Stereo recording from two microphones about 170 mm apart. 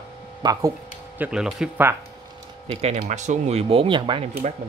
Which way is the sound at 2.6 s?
40° right (ahead or behind).